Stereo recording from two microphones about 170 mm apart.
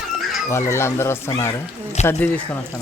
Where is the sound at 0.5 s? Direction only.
15° left (ahead or behind).